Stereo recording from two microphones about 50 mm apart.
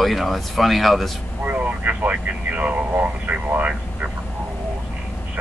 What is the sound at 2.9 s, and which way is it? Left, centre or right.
Speech, right.